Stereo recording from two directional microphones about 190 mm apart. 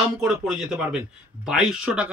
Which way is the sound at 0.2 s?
5° right (ahead or behind).